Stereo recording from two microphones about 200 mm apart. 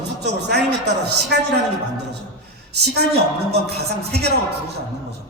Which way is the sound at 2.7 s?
55° right (ahead or behind).